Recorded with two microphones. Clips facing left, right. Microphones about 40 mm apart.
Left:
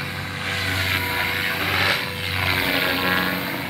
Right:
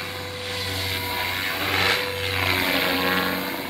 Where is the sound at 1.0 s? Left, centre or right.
Centre.